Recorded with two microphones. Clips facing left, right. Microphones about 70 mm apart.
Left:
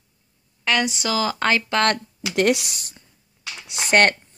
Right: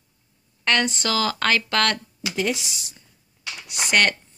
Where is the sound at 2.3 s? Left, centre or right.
Left.